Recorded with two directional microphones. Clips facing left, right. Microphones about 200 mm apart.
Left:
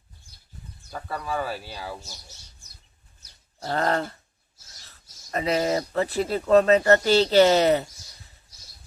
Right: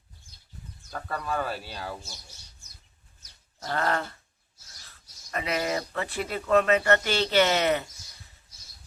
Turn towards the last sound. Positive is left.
turn(degrees=35)  # may be behind; listen again after turning